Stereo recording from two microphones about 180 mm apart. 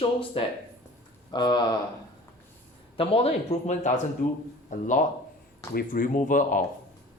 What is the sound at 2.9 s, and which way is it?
A man's voice, 35° left (ahead or behind).